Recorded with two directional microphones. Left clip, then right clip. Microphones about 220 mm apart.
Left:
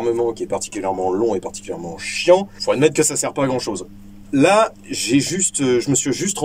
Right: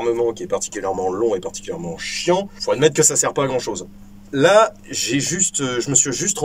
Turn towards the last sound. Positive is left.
turn(degrees=5)  # may be behind; listen again after turning